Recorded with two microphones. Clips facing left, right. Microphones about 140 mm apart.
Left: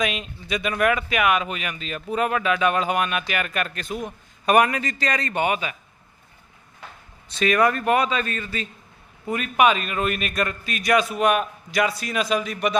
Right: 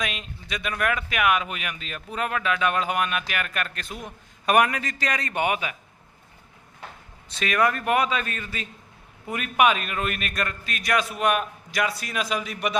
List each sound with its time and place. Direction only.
0.0 s a man's voice: centre (ahead or behind)
7.3 s speech: centre (ahead or behind)